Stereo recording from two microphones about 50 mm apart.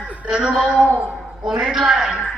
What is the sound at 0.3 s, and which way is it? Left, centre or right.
A man's voice, centre.